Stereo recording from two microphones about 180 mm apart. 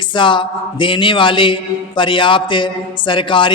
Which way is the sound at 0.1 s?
25° left (ahead or behind).